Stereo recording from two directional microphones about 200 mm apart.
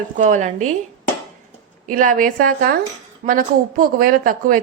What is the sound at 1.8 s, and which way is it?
A woman's voice, 40° right (ahead or behind).